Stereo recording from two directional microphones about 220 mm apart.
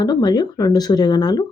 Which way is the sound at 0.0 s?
20° left (ahead or behind).